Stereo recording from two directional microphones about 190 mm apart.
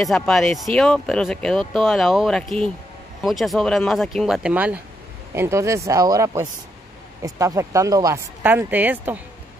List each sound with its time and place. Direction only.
0.0 s speech: centre (ahead or behind)